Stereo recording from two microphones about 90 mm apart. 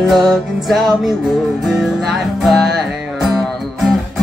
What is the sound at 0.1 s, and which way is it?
Music, centre (ahead or behind).